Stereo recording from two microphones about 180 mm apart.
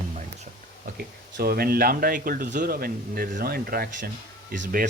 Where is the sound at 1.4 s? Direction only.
60° right (ahead or behind).